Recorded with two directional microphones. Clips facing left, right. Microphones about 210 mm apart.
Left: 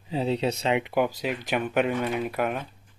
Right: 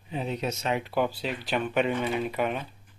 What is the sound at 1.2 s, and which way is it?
Speech, 10° left (ahead or behind).